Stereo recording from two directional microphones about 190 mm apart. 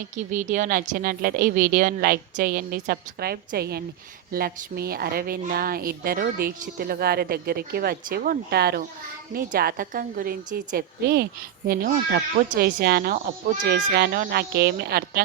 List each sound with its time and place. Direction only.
0.2 s a woman's voice: 40° right (ahead or behind)